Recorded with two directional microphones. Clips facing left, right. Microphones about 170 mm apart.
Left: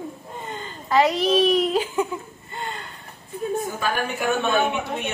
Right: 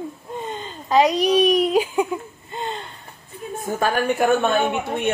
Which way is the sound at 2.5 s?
20° right (ahead or behind).